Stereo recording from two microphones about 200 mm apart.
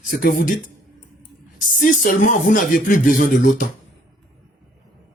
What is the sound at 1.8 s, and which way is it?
Speech, 45° left (ahead or behind).